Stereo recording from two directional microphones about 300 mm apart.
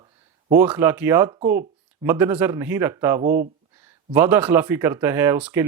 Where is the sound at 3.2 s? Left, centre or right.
Right.